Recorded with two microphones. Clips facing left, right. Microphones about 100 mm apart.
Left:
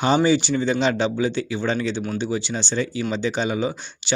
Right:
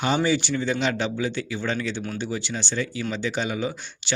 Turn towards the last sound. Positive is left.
turn(degrees=25)  # may be behind; listen again after turning